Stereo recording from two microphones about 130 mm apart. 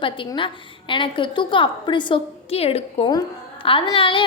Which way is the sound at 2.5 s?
50° left (ahead or behind).